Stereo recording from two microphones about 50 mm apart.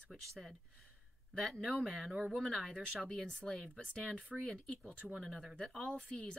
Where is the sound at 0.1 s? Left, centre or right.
Centre.